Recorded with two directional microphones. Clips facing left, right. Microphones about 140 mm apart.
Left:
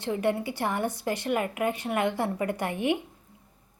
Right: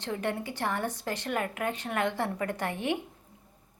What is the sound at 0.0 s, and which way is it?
A woman's voice, 10° left (ahead or behind).